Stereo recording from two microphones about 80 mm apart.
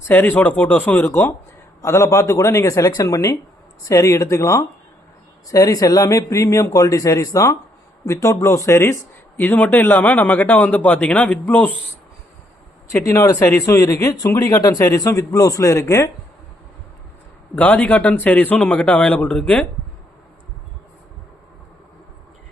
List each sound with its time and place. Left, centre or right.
0.1 s a man's voice: left
9.4 s a man's voice: left
12.9 s a man's voice: left
17.5 s a man's voice: centre